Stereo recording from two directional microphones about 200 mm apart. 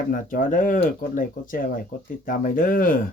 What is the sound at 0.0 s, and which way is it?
Speech, 40° left (ahead or behind).